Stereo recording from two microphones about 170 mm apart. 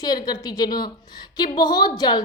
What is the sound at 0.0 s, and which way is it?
A woman's voice, 25° left (ahead or behind).